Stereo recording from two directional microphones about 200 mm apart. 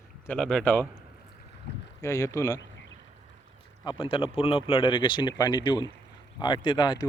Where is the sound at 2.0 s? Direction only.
15° left (ahead or behind).